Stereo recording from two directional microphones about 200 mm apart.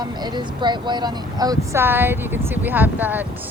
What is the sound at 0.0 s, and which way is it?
A woman's voice, 20° right (ahead or behind).